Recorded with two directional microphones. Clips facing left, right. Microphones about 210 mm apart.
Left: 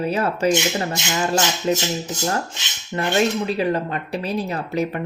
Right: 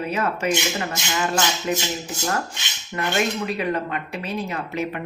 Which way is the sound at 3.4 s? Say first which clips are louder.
Left 3 dB; 30° left (ahead or behind).